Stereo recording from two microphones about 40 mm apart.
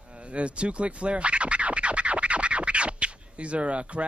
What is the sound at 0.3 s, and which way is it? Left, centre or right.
Scratching, right.